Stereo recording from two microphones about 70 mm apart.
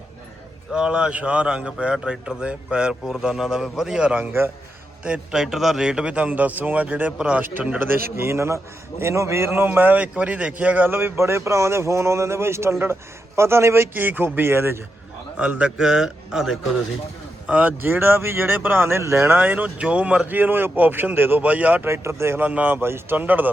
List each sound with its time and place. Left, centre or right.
0.7 s a man's voice: centre
4.3 s speech: right
5.3 s a man's voice: centre
7.8 s speech: right
9.6 s speech: right
13.9 s speech: right
15.4 s a man's voice: centre
17.4 s speech: centre
17.8 s speech: right
19.4 s speech: right
21.8 s speech: right
22.4 s speech: right